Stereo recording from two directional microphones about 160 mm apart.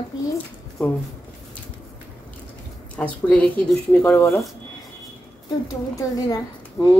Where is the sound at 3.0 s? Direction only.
10° left (ahead or behind).